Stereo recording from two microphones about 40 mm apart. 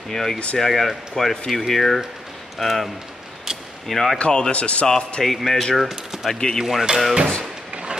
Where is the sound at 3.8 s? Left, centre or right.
Centre.